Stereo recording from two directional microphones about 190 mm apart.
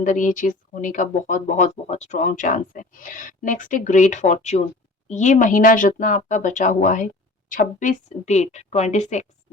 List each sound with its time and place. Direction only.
0.0 s a woman's voice: 45° left (ahead or behind)